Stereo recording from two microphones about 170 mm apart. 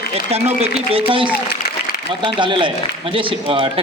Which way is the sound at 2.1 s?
30° right (ahead or behind).